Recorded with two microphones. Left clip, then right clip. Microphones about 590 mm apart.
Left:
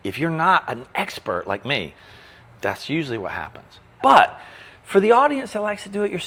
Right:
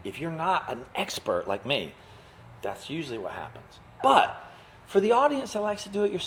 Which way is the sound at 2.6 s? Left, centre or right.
Left.